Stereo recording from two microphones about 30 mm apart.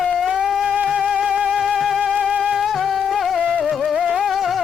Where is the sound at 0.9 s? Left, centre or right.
Right.